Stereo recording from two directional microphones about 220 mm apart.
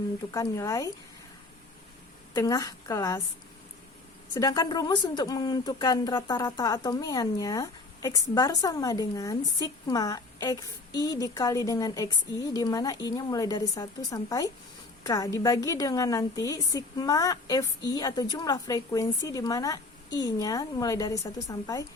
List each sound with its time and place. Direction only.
0.3 s speech: 15° left (ahead or behind)
2.3 s speech: 15° left (ahead or behind)
4.4 s speech: 15° left (ahead or behind)